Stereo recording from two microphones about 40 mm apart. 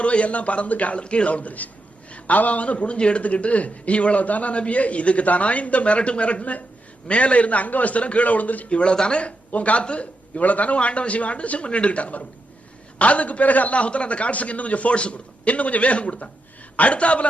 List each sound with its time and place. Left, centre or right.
0.0 s a man's voice: left
8.8 s speech: left
9.5 s a man's voice: left